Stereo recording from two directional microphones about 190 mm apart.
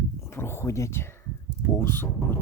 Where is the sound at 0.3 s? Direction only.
10° left (ahead or behind).